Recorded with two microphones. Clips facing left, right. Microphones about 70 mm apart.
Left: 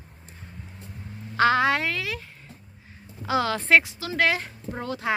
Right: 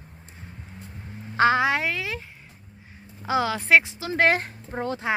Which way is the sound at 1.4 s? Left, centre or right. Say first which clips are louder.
Even; right.